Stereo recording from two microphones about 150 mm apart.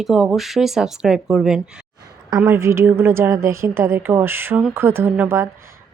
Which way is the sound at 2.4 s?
15° right (ahead or behind).